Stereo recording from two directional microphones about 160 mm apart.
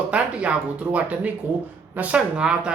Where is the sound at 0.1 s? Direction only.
10° right (ahead or behind).